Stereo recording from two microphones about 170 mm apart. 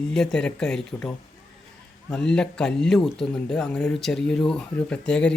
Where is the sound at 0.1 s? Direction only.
5° left (ahead or behind).